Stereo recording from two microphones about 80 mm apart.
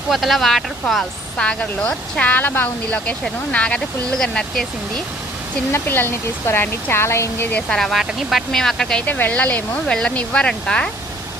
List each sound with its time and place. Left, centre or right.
0.1 s speech: centre
1.4 s speech: centre
4.2 s speech: centre
5.7 s speech: left
7.7 s speech: centre
9.0 s speech: left